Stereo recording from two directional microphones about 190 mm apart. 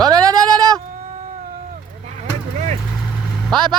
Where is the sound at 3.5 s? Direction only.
25° right (ahead or behind).